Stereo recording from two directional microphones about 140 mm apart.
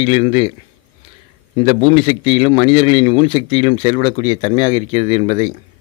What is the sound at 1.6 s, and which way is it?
A man's voice, 35° left (ahead or behind).